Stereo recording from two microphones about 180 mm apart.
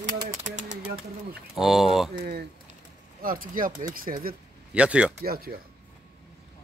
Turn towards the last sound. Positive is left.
turn(degrees=-55)  # may be behind; listen again after turning